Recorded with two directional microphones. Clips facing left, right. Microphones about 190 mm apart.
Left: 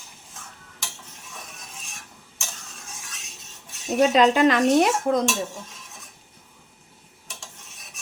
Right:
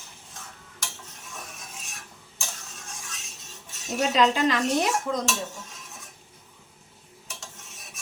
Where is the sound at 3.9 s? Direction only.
55° left (ahead or behind).